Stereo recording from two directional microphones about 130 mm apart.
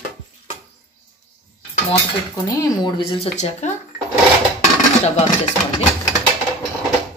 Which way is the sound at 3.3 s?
60° left (ahead or behind).